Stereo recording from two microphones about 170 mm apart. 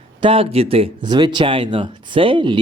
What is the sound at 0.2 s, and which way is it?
Speech, 30° right (ahead or behind).